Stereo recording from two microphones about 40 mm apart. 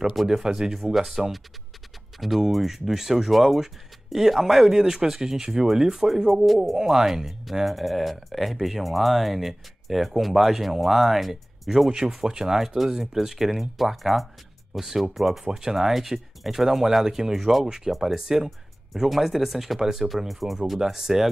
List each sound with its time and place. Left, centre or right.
0.0 s speech: centre
6.3 s speech: centre
6.8 s speech: centre
11.9 s speech: centre
20.8 s speech: centre